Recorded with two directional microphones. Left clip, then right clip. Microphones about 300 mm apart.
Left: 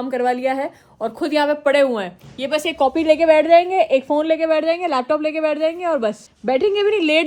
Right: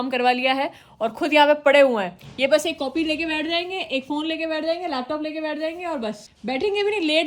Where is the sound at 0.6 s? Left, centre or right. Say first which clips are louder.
Even; right.